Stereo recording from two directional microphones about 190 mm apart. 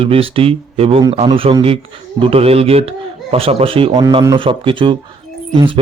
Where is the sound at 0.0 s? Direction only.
30° right (ahead or behind).